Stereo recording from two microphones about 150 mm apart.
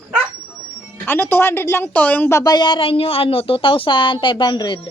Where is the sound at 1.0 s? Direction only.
15° left (ahead or behind).